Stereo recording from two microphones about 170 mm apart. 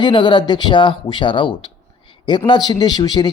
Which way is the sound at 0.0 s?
25° left (ahead or behind).